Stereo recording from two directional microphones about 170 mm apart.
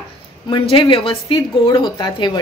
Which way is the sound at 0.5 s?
30° left (ahead or behind).